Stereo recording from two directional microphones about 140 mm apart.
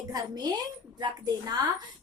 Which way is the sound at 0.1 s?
30° right (ahead or behind).